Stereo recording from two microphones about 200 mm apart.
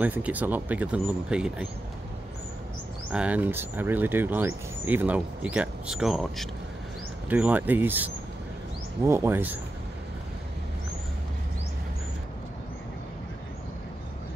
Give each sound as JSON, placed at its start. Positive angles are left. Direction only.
{"t": 0.0, "sound": "speech", "side_deg": -10}
{"t": 3.1, "sound": "speech", "side_deg": -5}